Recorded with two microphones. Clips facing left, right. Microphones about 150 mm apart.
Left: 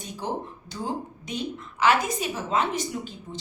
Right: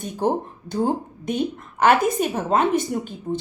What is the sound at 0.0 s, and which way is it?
Speech, 55° right (ahead or behind).